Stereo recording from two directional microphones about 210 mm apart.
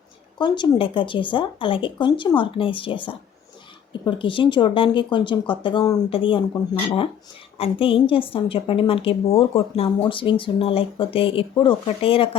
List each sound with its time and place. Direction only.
0.3 s a woman's voice: 20° left (ahead or behind)
7.6 s a woman's voice: 25° left (ahead or behind)